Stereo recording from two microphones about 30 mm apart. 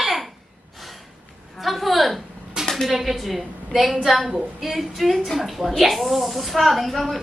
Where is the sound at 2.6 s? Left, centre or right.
Right.